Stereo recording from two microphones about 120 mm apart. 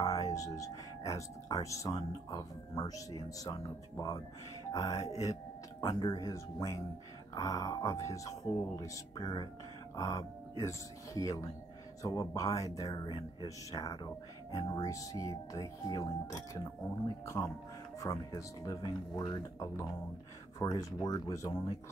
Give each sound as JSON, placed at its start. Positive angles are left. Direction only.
{"t": 0.0, "sound": "speech", "side_deg": 30}
{"t": 4.7, "sound": "speech", "side_deg": 35}